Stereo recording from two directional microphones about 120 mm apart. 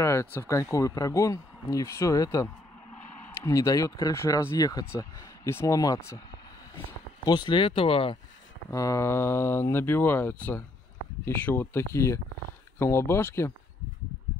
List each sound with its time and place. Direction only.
0.0 s speech: 25° left (ahead or behind)
7.2 s speech: 40° left (ahead or behind)
8.6 s speech: 25° left (ahead or behind)